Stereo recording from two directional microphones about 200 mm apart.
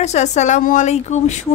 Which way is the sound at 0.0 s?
35° left (ahead or behind).